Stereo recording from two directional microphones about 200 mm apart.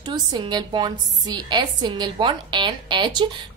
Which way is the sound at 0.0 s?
20° right (ahead or behind).